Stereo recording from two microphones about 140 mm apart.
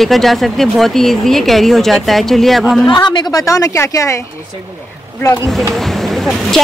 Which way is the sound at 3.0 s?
30° left (ahead or behind).